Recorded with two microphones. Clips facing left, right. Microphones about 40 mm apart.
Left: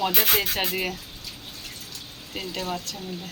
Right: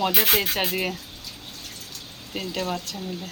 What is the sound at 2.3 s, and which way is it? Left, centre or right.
Speech, centre.